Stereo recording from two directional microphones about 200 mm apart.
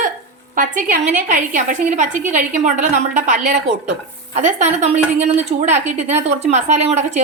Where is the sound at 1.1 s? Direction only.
40° right (ahead or behind).